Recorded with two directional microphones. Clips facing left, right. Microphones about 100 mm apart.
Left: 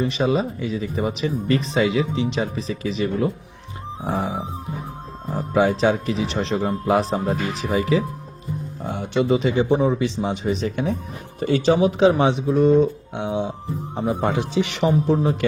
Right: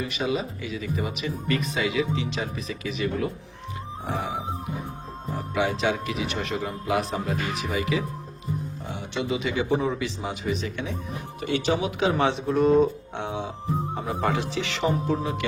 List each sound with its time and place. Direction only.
0.0 s speech: 35° left (ahead or behind)
5.4 s speech: 35° left (ahead or behind)
8.9 s speech: 55° left (ahead or behind)
9.2 s speech: 35° left (ahead or behind)
9.7 s speech: 20° left (ahead or behind)
12.1 s speech: 15° left (ahead or behind)
12.5 s speech: centre (ahead or behind)
13.1 s speech: 15° left (ahead or behind); by 15.4 s 35° left (ahead or behind)